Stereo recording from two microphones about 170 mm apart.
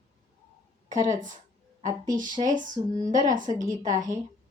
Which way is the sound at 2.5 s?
50° right (ahead or behind).